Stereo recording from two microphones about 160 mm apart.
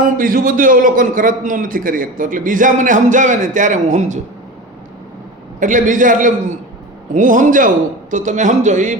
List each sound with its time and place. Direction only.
0.2 s a man's voice: 60° right (ahead or behind)
5.5 s a man's voice: 55° right (ahead or behind)